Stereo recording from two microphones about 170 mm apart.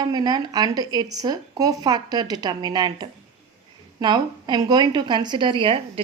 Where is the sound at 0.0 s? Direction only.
25° right (ahead or behind).